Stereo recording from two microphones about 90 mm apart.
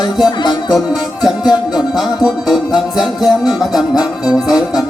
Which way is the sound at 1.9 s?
5° right (ahead or behind).